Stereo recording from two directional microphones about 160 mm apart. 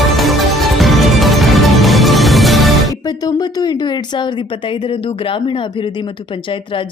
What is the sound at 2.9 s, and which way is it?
Speech, 25° left (ahead or behind).